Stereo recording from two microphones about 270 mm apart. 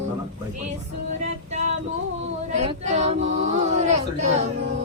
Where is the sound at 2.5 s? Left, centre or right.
Right.